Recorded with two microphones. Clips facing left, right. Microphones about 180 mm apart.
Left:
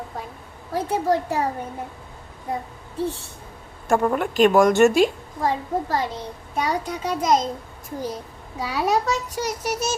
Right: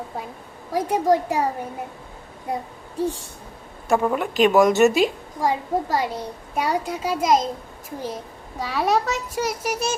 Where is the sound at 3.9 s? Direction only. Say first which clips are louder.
Even; centre (ahead or behind).